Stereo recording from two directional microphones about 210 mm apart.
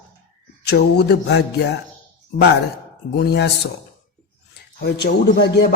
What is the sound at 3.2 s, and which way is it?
Speech, 50° left (ahead or behind).